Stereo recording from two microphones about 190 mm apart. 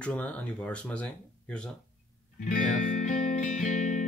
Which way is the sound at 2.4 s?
45° left (ahead or behind).